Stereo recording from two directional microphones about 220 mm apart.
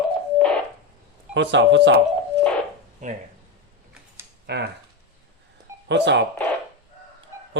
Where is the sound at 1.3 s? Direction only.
55° right (ahead or behind).